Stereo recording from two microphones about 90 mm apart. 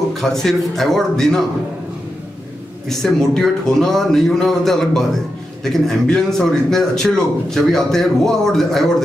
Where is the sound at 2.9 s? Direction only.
5° left (ahead or behind).